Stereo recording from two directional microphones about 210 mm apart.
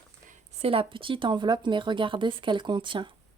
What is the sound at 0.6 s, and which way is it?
Speech, 25° right (ahead or behind).